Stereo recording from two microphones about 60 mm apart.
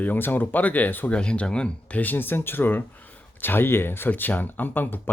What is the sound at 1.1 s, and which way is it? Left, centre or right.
Speech, centre.